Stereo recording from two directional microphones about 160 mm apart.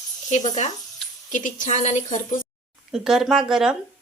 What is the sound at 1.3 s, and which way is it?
A woman's voice, 55° left (ahead or behind).